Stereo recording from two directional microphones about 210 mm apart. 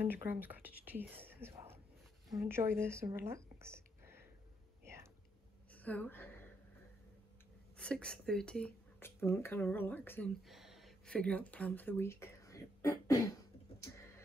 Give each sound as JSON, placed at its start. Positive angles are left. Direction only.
{"t": 0.0, "sound": "speech", "side_deg": -10}
{"t": 5.7, "sound": "a sound", "side_deg": 5}
{"t": 7.7, "sound": "speech", "side_deg": 5}